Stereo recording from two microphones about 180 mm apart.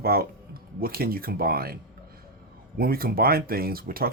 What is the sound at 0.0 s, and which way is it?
Speech, 55° right (ahead or behind).